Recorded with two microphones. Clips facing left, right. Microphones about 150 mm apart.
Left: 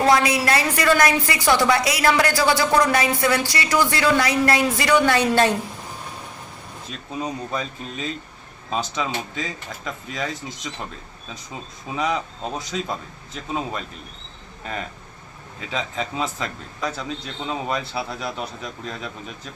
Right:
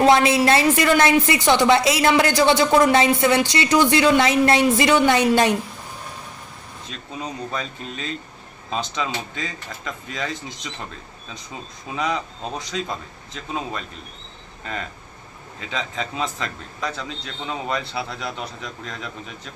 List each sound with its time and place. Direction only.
0.0 s speech: 25° right (ahead or behind)
7.2 s a man's voice: 5° left (ahead or behind)
11.9 s speech: 5° left (ahead or behind)
15.7 s speech: 5° left (ahead or behind)